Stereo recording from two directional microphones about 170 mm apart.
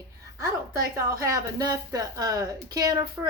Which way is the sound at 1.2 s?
20° right (ahead or behind).